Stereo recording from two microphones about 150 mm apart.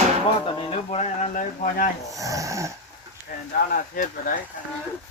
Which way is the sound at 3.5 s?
70° left (ahead or behind).